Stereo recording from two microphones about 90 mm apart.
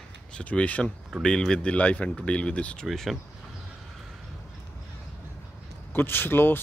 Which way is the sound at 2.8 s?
Centre (ahead or behind).